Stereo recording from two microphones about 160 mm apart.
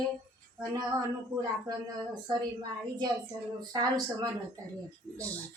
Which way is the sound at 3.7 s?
25° right (ahead or behind).